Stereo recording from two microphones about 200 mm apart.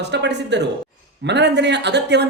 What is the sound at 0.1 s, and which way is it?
Speech, 60° right (ahead or behind).